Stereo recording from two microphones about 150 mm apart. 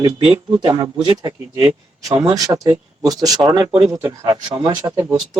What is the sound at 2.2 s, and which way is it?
Speech, 25° right (ahead or behind).